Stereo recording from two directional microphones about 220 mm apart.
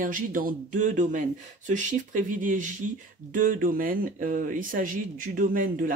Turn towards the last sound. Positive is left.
turn(degrees=-40)  # may be behind; listen again after turning